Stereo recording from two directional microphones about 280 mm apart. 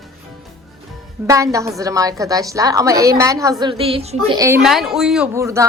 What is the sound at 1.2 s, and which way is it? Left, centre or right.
A woman's voice, centre.